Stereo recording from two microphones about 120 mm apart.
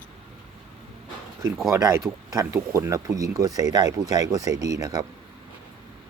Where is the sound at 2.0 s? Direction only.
5° right (ahead or behind).